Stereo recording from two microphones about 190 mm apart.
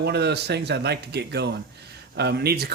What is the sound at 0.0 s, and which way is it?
Speech, 60° right (ahead or behind).